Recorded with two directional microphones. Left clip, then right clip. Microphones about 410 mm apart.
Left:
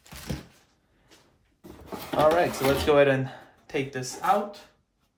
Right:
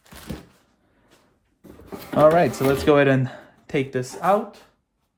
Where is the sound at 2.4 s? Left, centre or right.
Centre.